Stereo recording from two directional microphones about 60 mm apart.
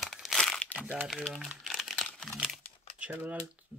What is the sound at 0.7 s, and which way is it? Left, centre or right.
Crumpling, left.